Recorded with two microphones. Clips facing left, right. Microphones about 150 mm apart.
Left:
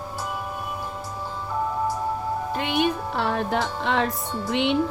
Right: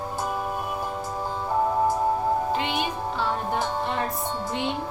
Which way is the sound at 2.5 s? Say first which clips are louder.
Left 3 dB; 55° left (ahead or behind).